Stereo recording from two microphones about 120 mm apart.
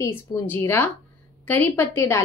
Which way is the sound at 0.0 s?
20° left (ahead or behind).